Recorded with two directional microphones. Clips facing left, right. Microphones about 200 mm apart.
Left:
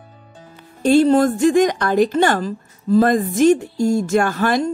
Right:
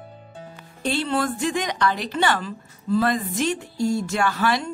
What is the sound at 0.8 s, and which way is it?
Speech, 45° left (ahead or behind).